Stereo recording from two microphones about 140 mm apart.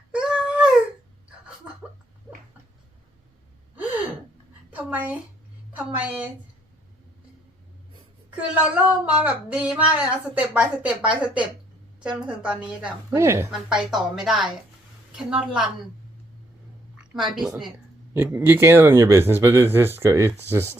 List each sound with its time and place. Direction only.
0.1 s a sound: 5° right (ahead or behind)
4.7 s a sound: 10° right (ahead or behind)
5.7 s speech: 10° right (ahead or behind)
8.4 s speech: 10° right (ahead or behind)
13.1 s speech: 20° right (ahead or behind)
13.5 s speech: 5° right (ahead or behind)
18.1 s speech: 15° right (ahead or behind)